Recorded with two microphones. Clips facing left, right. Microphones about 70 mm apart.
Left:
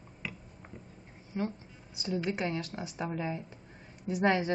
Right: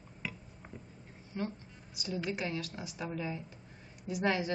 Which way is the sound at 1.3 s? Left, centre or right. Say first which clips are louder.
Left 3 dB; centre.